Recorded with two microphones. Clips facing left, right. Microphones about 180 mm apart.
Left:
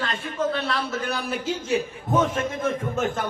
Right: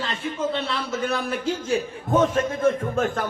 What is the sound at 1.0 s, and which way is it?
Speech, centre (ahead or behind).